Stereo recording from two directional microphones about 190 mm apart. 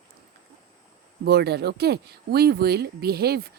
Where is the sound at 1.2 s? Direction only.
60° right (ahead or behind).